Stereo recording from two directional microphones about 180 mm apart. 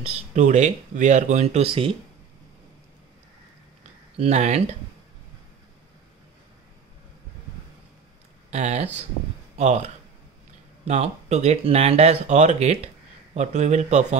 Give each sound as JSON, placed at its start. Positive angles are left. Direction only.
{"t": 0.0, "sound": "speech", "side_deg": -40}
{"t": 4.2, "sound": "speech", "side_deg": -40}
{"t": 8.5, "sound": "speech", "side_deg": -40}
{"t": 10.9, "sound": "speech", "side_deg": -40}